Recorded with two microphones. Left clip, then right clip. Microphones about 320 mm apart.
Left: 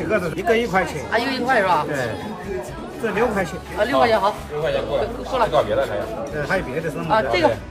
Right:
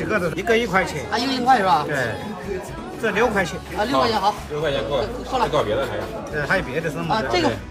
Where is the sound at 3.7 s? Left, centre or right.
Centre.